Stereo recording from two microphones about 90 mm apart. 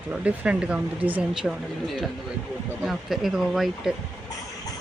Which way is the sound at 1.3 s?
5° right (ahead or behind).